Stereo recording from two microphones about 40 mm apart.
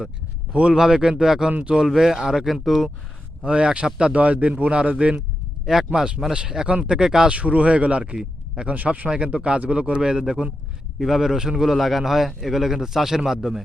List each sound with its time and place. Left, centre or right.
0.5 s a man's voice: right
0.8 s a man's voice: centre
3.4 s a man's voice: right
4.1 s speech: right
5.6 s a man's voice: centre
6.7 s a man's voice: right
7.0 s a man's voice: centre
7.3 s speech: right
9.0 s a man's voice: right
11.0 s a man's voice: centre